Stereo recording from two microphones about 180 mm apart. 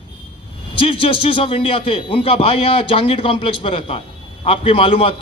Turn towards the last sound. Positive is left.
turn(degrees=30)  # may be behind; listen again after turning